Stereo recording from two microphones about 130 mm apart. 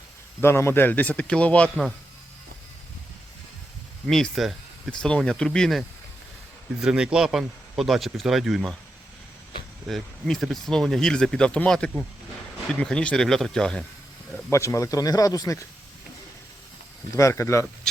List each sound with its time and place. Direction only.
0.4 s speech: 20° left (ahead or behind)
4.0 s speech: 5° left (ahead or behind)
9.8 s speech: centre (ahead or behind)
14.5 s speech: 25° left (ahead or behind)
17.2 s speech: 25° left (ahead or behind)